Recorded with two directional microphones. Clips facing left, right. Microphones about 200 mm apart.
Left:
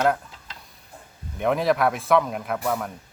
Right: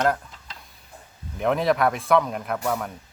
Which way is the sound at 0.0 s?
5° left (ahead or behind).